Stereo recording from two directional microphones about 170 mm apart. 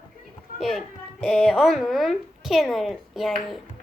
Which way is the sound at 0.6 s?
Centre (ahead or behind).